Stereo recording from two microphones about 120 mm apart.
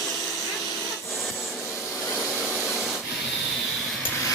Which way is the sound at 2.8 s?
Centre (ahead or behind).